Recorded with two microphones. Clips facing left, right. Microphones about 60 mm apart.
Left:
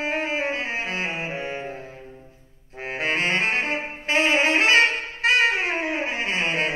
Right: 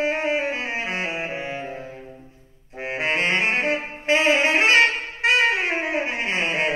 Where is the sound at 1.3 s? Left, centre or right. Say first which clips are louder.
Even; centre.